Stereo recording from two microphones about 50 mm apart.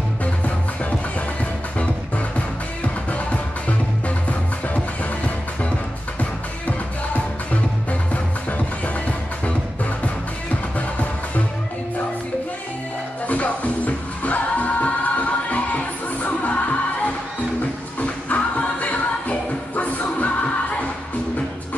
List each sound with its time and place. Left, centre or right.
1.4 s music: left
8.1 s music: left
13.3 s music: left